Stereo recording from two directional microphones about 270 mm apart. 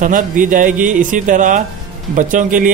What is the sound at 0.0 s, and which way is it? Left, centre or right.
A man's voice, right.